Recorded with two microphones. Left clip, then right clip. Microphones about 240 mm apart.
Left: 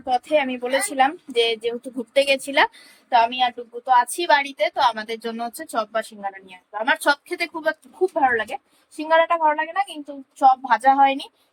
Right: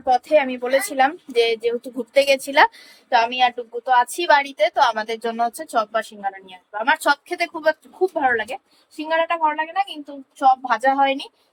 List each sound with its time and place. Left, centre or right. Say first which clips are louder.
0.0 s a woman's voice: right 3 dB; centre